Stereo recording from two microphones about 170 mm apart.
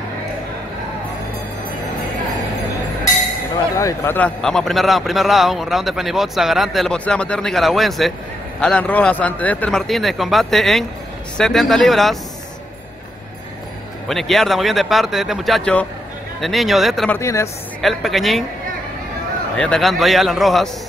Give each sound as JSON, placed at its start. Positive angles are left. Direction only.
{"t": 3.7, "sound": "a man's voice", "side_deg": 15}
{"t": 14.0, "sound": "a man's voice", "side_deg": 0}
{"t": 17.2, "sound": "speech", "side_deg": 15}
{"t": 17.8, "sound": "a man's voice", "side_deg": 0}
{"t": 19.5, "sound": "a man's voice", "side_deg": 5}